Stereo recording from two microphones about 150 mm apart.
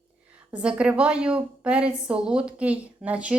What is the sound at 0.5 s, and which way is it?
A woman's voice, 5° right (ahead or behind).